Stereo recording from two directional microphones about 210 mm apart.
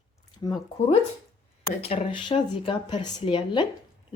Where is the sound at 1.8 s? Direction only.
30° left (ahead or behind).